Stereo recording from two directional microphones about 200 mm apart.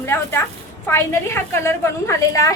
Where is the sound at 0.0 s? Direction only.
10° left (ahead or behind).